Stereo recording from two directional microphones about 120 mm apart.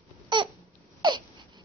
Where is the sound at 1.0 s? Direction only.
40° right (ahead or behind).